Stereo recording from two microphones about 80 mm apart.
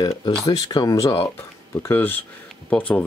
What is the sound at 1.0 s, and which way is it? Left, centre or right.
Speech, left.